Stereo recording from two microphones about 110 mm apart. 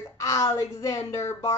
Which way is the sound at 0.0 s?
30° left (ahead or behind).